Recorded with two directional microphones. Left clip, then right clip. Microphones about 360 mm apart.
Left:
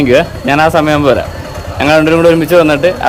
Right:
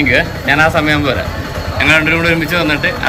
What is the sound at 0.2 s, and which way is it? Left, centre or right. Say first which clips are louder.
A man's voice: left 2 dB; left.